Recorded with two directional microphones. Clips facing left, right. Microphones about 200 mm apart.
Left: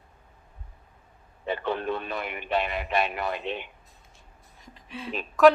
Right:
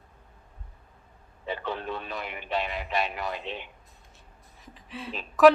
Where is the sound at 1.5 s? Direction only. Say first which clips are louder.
Left 4 dB; 55° left (ahead or behind).